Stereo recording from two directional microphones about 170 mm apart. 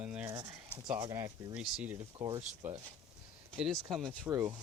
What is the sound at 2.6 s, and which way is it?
Speech, 10° right (ahead or behind).